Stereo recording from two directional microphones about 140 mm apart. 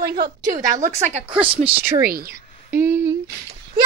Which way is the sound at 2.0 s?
90° right.